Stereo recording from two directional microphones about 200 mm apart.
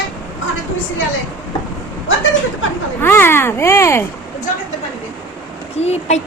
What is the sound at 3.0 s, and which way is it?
A woman's voice, 10° left (ahead or behind).